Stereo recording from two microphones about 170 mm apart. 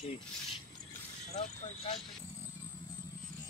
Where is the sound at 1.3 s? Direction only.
40° left (ahead or behind).